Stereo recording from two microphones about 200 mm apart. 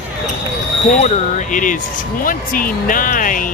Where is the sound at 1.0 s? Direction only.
35° left (ahead or behind).